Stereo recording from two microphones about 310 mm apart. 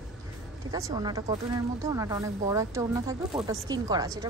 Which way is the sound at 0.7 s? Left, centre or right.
Centre.